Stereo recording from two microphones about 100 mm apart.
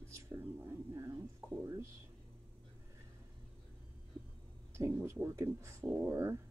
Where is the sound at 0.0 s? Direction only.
25° right (ahead or behind).